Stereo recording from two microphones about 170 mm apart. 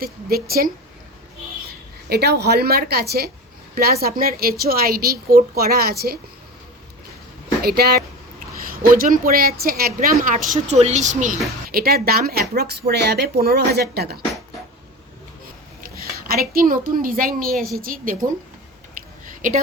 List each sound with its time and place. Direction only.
0.0 s a woman's voice: 65° right (ahead or behind)
2.0 s a woman's voice: 70° right (ahead or behind)
7.6 s a woman's voice: 65° right (ahead or behind); by 11.3 s 45° right (ahead or behind)
11.7 s a woman's voice: 65° right (ahead or behind)
16.2 s a woman's voice: 65° right (ahead or behind)
19.2 s a sound: 55° right (ahead or behind)